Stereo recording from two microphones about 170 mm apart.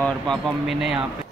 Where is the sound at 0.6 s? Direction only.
5° right (ahead or behind).